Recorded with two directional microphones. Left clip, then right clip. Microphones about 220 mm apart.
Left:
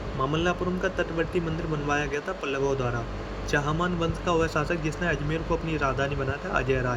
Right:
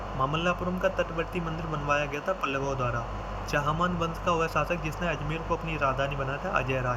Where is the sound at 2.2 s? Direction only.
20° left (ahead or behind).